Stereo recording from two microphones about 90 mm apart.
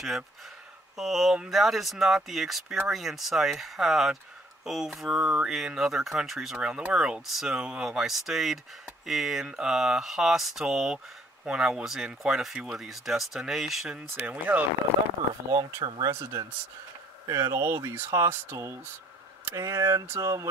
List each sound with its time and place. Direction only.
0.9 s speech: 5° right (ahead or behind)
14.1 s speech: 15° right (ahead or behind)
15.5 s speech: 45° right (ahead or behind)
16.1 s speech: 30° right (ahead or behind)